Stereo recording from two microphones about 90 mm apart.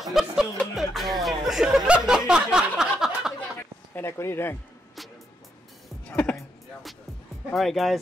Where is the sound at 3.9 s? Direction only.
30° left (ahead or behind).